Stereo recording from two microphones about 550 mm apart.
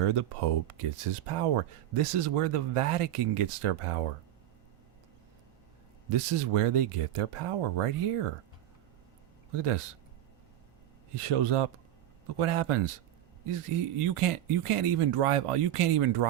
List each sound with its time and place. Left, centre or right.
0.0 s speech: right
6.1 s speech: right
9.5 s speech: right
11.1 s speech: right